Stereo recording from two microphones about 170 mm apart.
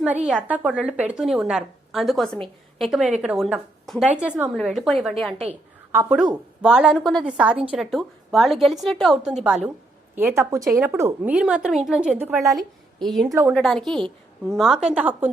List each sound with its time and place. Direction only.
0.0 s a woman's voice: 5° right (ahead or behind)
5.5 s a woman's voice: 10° right (ahead or behind)
10.2 s a woman's voice: 15° right (ahead or behind)
12.5 s a woman's voice: centre (ahead or behind)
13.2 s speech: 20° right (ahead or behind)
13.5 s a woman's voice: 5° left (ahead or behind)